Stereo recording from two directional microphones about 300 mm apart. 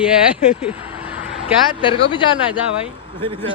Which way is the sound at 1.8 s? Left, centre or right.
Centre.